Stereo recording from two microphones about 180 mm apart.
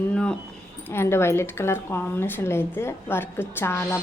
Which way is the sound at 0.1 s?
5° left (ahead or behind).